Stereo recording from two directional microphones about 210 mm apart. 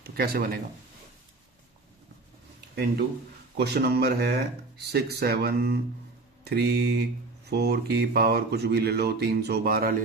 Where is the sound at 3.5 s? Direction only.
50° right (ahead or behind).